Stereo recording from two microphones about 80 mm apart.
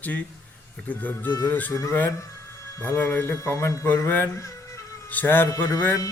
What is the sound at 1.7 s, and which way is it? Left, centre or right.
Speech, left.